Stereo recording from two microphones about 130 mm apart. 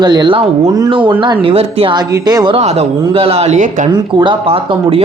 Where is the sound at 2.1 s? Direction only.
30° right (ahead or behind).